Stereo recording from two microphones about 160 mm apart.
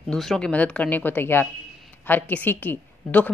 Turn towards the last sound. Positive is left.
turn(degrees=10)  # may be behind; listen again after turning